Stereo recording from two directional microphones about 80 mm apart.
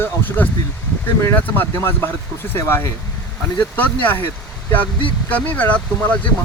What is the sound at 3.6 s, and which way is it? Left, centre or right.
Speech, left.